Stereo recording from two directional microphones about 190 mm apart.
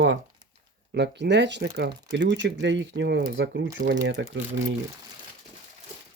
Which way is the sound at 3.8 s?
55° right (ahead or behind).